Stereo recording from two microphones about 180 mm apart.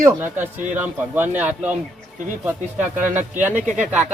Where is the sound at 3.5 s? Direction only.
45° right (ahead or behind).